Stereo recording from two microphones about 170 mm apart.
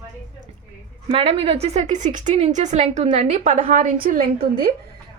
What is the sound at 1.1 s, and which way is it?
A woman's voice, 35° right (ahead or behind).